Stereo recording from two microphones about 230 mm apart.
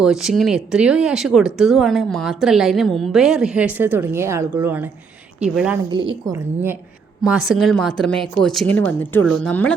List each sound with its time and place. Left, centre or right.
0.0 s speech: centre
5.9 s a woman's voice: right; by 9.7 s centre